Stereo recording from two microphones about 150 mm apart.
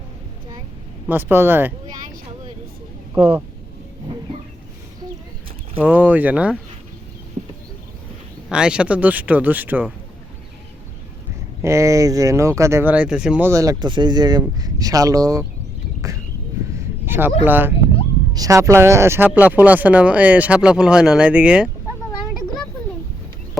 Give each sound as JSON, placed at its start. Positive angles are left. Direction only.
{"t": 1.0, "sound": "speech", "side_deg": -15}
{"t": 3.2, "sound": "speech", "side_deg": -40}
{"t": 5.8, "sound": "speech", "side_deg": -10}
{"t": 8.4, "sound": "speech", "side_deg": -5}
{"t": 11.6, "sound": "speech", "side_deg": -20}
{"t": 13.5, "sound": "speech", "side_deg": -20}
{"t": 16.0, "sound": "a sound", "side_deg": -20}
{"t": 17.4, "sound": "speech", "side_deg": -15}